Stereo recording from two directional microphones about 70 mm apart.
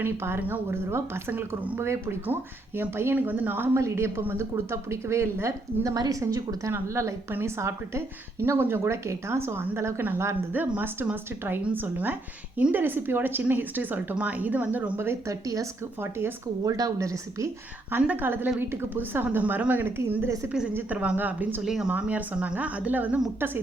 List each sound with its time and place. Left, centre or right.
0.0 s speech: right
1.3 s a woman's voice: right
1.8 s a woman's voice: right
3.8 s a woman's voice: right
6.7 s a woman's voice: right
15.3 s speech: right
16.0 s speech: right
16.6 s a woman's voice: right
18.0 s a woman's voice: right
21.6 s speech: centre
21.8 s a woman's voice: centre